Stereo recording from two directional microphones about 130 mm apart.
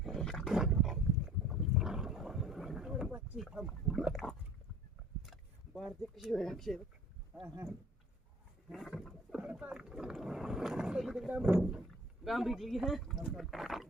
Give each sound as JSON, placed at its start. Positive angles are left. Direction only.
{"t": 0.0, "sound": "dog", "side_deg": 0}
{"t": 1.5, "sound": "boat", "side_deg": -5}
{"t": 3.3, "sound": "rowboat", "side_deg": -5}
{"t": 4.0, "sound": "a sound", "side_deg": 0}
{"t": 5.2, "sound": "speech", "side_deg": 0}
{"t": 7.4, "sound": "speech", "side_deg": -20}
{"t": 8.7, "sound": "speech", "side_deg": 0}